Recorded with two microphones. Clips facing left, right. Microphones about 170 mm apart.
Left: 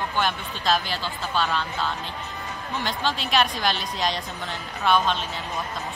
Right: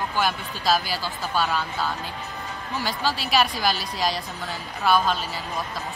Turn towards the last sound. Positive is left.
turn(degrees=-5)  # may be behind; listen again after turning